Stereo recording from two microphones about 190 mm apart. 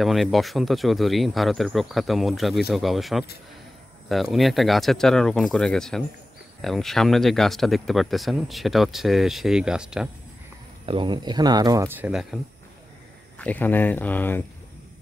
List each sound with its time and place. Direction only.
0.0 s speech: centre (ahead or behind)
10.9 s speech: 25° right (ahead or behind); by 12.4 s centre (ahead or behind)
13.4 s speech: 10° left (ahead or behind)